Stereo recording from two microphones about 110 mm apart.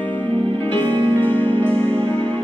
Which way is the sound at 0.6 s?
15° left (ahead or behind).